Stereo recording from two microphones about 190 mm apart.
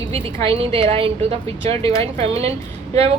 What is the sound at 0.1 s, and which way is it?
A woman's voice, 30° right (ahead or behind).